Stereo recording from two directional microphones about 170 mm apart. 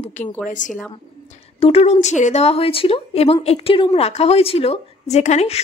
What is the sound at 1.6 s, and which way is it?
A woman's voice, 35° left (ahead or behind).